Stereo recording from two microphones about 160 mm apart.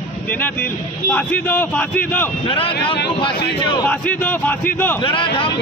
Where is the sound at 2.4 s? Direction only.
30° left (ahead or behind).